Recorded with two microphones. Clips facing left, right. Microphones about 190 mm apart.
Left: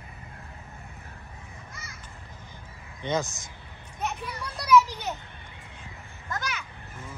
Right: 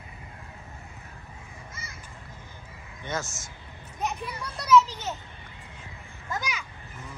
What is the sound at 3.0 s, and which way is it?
Speech, 15° left (ahead or behind).